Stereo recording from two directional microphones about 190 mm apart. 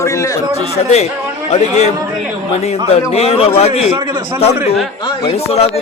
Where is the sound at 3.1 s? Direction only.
30° left (ahead or behind).